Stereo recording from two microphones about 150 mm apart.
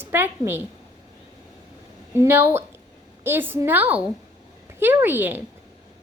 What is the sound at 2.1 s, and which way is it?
A woman's voice, 15° right (ahead or behind).